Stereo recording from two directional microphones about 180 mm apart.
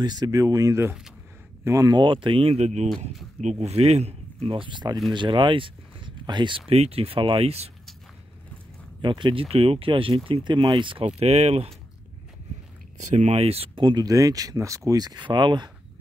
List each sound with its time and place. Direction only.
0.0 s speech: 20° right (ahead or behind)
9.0 s speech: 25° right (ahead or behind)
12.9 s speech: 40° right (ahead or behind); by 15.7 s 25° right (ahead or behind)